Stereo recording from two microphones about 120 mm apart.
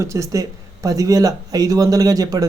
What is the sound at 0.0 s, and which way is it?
Speech, 25° right (ahead or behind).